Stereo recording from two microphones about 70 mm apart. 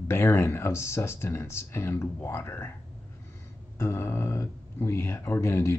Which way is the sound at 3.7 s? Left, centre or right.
Left.